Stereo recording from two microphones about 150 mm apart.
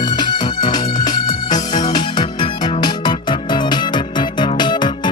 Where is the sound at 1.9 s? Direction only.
30° left (ahead or behind).